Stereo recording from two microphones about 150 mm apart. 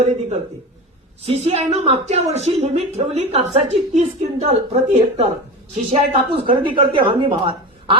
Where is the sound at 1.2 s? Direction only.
45° right (ahead or behind).